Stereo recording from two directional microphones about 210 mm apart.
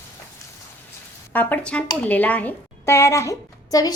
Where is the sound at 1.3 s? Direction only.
10° left (ahead or behind).